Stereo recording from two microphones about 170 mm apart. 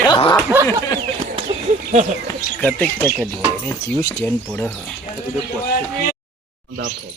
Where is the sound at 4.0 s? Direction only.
20° left (ahead or behind).